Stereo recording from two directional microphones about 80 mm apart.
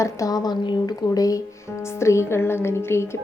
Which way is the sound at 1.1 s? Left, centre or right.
Left.